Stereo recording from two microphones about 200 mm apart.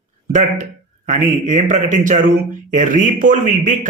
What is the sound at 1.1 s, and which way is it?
Speech, 40° right (ahead or behind).